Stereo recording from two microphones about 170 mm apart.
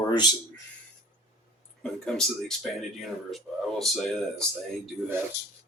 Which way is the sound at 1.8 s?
5° left (ahead or behind).